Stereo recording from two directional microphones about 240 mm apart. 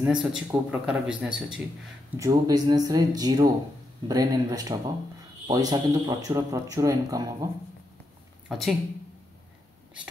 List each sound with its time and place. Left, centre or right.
0.0 s a man's voice: centre
2.1 s speech: centre
8.5 s speech: centre